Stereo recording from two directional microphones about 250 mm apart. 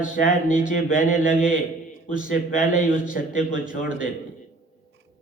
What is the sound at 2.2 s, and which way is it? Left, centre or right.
A man's voice, left.